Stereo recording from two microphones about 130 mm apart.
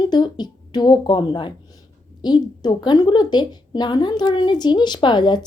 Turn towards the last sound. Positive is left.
turn(degrees=35)  # may be behind; listen again after turning